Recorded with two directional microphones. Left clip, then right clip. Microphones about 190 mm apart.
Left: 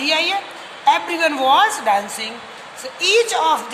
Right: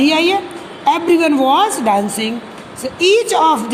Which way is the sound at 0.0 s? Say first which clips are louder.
Right 5 dB; 20° right (ahead or behind).